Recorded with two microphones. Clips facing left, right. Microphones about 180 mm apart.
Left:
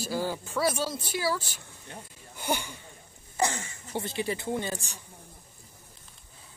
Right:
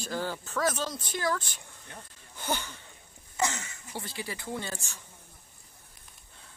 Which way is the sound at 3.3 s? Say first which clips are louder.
Left 2 dB; 30° left (ahead or behind).